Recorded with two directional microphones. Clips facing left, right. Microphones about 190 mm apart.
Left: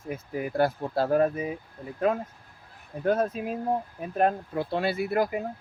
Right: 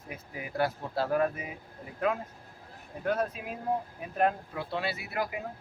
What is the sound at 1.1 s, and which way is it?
Speech, 35° left (ahead or behind).